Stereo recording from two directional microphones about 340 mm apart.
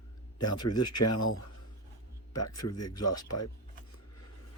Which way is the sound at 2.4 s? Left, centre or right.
Left.